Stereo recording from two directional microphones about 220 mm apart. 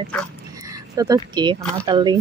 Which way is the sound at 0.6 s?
15° right (ahead or behind).